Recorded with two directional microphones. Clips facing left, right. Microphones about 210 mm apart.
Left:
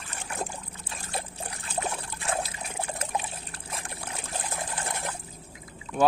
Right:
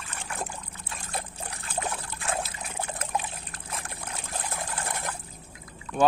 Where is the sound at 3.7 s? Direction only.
30° left (ahead or behind).